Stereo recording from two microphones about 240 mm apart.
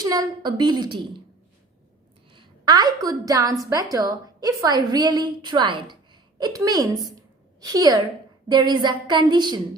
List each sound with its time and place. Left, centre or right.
0.0 s a woman's voice: centre
2.3 s a woman's voice: centre
7.2 s a sound: centre
8.4 s a woman's voice: centre